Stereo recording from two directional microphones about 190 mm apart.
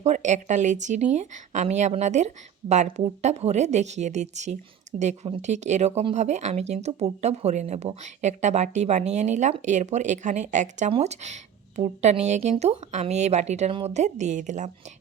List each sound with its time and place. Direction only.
0.0 s a woman's voice: 40° right (ahead or behind)